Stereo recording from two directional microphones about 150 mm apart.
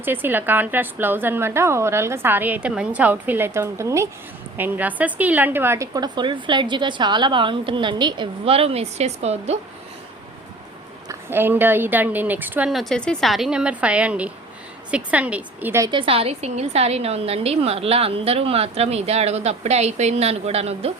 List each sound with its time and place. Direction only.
0.0 s a woman's voice: 15° right (ahead or behind); by 9.6 s 45° right (ahead or behind)
11.1 s a woman's voice: 15° right (ahead or behind)
15.9 s a woman's voice: 35° right (ahead or behind)